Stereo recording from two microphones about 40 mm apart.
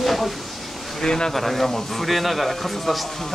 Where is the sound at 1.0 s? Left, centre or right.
Centre.